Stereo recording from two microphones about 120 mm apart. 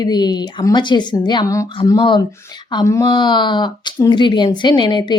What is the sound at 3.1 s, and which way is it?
Speech, 40° left (ahead or behind).